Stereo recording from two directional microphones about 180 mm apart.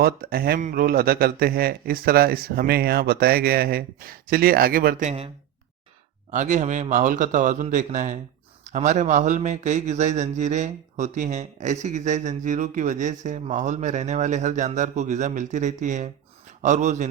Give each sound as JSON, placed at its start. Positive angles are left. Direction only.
{"t": 0.0, "sound": "speech", "side_deg": -55}
{"t": 6.3, "sound": "a man's voice", "side_deg": -40}